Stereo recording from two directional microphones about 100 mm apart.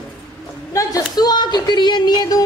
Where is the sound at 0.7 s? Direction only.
40° left (ahead or behind).